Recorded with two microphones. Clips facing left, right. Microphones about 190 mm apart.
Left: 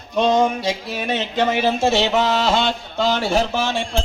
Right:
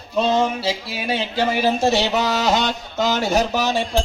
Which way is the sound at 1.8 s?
40° right (ahead or behind).